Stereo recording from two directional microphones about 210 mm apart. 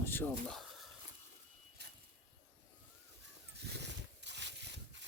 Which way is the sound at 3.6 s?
55° right (ahead or behind).